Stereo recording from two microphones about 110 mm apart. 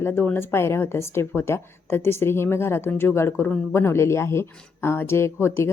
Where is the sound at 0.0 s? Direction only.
20° left (ahead or behind).